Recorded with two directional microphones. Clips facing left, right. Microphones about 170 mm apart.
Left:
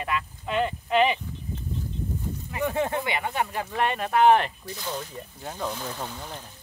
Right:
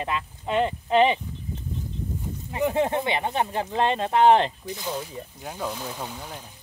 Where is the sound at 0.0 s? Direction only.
25° right (ahead or behind).